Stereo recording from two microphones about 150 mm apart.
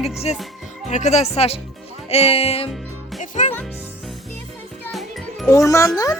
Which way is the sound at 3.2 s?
55° left (ahead or behind).